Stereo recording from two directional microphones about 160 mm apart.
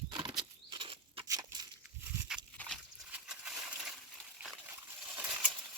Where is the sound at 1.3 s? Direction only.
25° right (ahead or behind).